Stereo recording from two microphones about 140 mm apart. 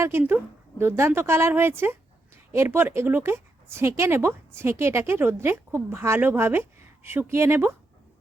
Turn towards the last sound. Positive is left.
turn(degrees=-15)  # may be behind; listen again after turning